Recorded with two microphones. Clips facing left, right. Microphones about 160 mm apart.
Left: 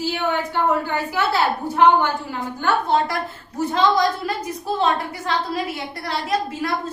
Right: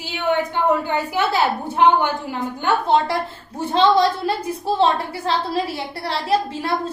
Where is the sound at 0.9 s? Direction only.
20° right (ahead or behind).